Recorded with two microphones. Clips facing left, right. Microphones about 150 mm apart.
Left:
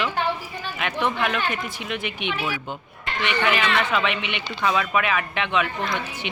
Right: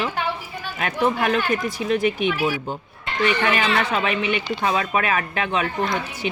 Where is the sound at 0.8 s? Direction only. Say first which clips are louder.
Right 3 dB; 40° right (ahead or behind).